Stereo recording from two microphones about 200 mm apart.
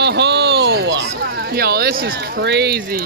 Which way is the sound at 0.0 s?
55° right (ahead or behind).